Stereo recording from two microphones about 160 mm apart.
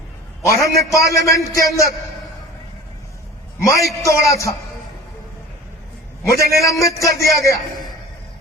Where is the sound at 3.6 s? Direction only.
20° left (ahead or behind).